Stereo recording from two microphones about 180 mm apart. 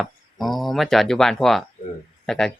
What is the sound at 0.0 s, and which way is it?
Speech, centre (ahead or behind).